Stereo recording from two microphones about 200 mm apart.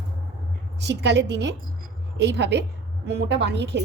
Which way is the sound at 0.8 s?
60° right (ahead or behind).